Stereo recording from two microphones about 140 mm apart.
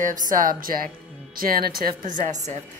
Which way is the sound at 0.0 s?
70° right (ahead or behind).